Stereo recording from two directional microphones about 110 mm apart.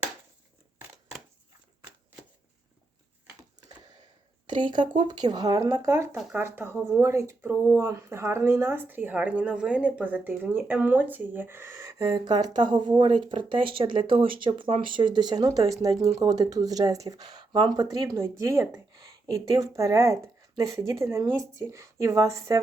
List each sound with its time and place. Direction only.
4.4 s speech: 45° right (ahead or behind)
17.8 s speech: 35° right (ahead or behind)